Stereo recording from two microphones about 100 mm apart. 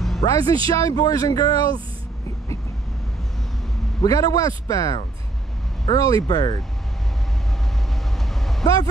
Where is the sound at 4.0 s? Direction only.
35° left (ahead or behind).